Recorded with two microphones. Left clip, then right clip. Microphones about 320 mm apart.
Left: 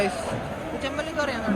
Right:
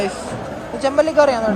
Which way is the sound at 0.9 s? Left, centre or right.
Right.